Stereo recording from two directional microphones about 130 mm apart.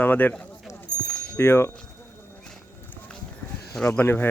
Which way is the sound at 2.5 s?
10° left (ahead or behind).